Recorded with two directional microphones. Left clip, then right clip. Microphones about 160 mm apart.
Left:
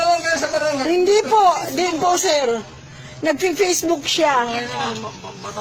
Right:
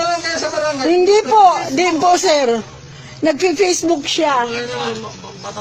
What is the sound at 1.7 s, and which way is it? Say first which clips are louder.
Speech: right 5 dB; 30° right (ahead or behind).